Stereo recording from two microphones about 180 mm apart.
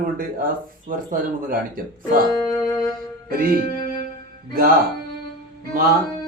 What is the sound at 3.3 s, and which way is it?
Speech, 55° right (ahead or behind).